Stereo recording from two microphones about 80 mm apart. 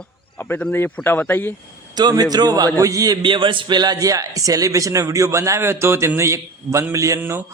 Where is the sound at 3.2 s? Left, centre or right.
Right.